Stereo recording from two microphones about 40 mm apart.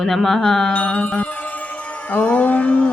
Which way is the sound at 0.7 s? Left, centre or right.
Left.